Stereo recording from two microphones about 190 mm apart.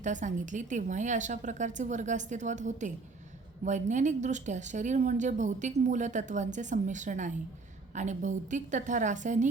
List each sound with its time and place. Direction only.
0.0 s speech: 40° right (ahead or behind)